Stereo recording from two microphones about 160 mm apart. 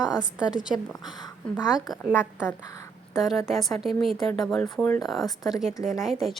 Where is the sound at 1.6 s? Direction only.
5° right (ahead or behind).